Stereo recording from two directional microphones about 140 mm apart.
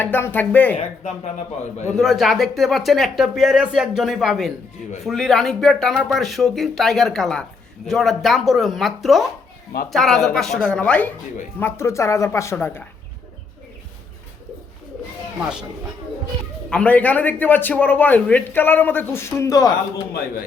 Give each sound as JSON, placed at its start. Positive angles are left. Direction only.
{"t": 0.0, "sound": "a man's voice", "side_deg": 15}
{"t": 0.8, "sound": "speech", "side_deg": 55}
{"t": 2.0, "sound": "speech", "side_deg": 0}
{"t": 11.6, "sound": "a man's voice", "side_deg": 20}
{"t": 15.4, "sound": "speech", "side_deg": -5}
{"t": 16.6, "sound": "a man's voice", "side_deg": 10}